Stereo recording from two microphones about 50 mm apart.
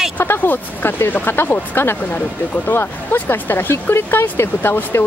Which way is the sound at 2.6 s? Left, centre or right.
Left.